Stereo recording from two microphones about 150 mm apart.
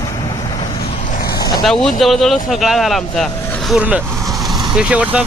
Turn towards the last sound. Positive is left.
turn(degrees=-10)  # may be behind; listen again after turning